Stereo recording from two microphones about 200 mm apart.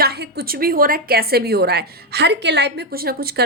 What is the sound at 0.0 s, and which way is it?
A woman's voice, 55° right (ahead or behind).